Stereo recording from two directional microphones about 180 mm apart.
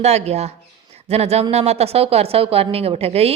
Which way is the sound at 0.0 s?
35° right (ahead or behind).